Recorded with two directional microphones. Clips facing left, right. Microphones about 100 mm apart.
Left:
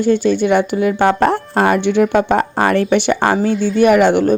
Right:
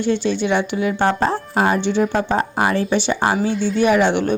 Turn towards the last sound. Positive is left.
turn(degrees=45)  # may be behind; listen again after turning